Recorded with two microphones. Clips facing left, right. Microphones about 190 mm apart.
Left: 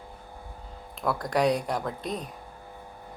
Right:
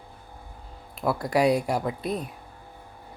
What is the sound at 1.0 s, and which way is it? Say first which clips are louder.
Speech: right 2 dB; 10° right (ahead or behind).